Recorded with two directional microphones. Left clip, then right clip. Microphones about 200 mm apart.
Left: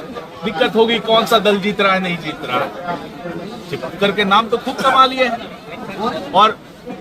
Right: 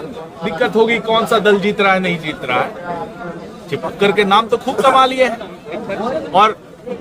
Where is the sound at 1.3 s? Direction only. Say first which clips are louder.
Right 1 dB; 35° right (ahead or behind).